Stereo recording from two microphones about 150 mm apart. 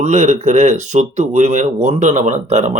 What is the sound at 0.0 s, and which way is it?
A man's voice, 50° right (ahead or behind).